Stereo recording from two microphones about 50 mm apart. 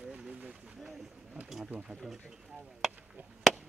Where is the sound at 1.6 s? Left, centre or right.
Right.